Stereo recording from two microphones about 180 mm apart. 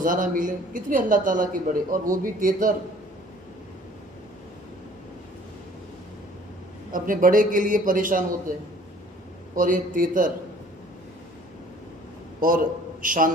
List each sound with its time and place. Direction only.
0.0 s speech: 45° right (ahead or behind)
6.9 s speech: 50° right (ahead or behind)
9.6 s speech: 50° right (ahead or behind)
12.4 s a man's voice: 50° right (ahead or behind)